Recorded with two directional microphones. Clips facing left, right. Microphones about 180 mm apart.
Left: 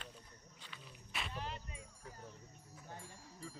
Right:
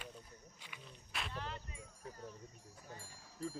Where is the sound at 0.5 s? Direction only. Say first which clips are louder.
Even; 15° right (ahead or behind).